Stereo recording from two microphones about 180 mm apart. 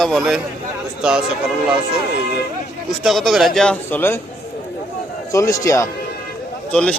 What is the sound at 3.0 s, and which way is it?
Speech, centre (ahead or behind).